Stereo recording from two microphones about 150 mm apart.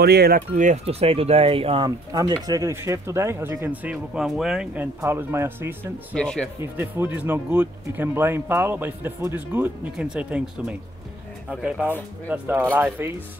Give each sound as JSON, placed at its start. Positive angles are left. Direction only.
{"t": 0.0, "sound": "speech", "side_deg": -90}
{"t": 1.9, "sound": "speech", "side_deg": -25}
{"t": 5.0, "sound": "speech", "side_deg": -15}
{"t": 6.1, "sound": "speech", "side_deg": 5}
{"t": 6.6, "sound": "speech", "side_deg": -15}